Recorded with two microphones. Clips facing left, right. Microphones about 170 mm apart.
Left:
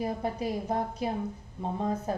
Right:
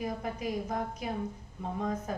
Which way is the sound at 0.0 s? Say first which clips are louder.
Left 4 dB; 30° left (ahead or behind).